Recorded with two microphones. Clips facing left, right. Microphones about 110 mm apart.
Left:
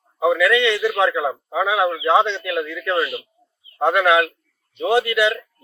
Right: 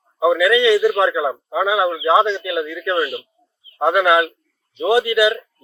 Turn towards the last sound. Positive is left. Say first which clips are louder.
# right 2 dB
turn(degrees=-5)  # may be behind; listen again after turning